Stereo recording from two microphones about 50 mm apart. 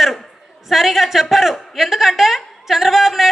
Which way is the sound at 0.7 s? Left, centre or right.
Centre.